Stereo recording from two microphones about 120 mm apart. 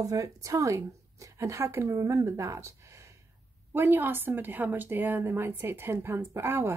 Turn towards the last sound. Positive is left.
turn(degrees=-20)  # may be behind; listen again after turning